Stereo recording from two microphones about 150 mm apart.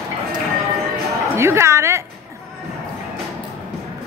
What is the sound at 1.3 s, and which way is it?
Speech, 15° right (ahead or behind).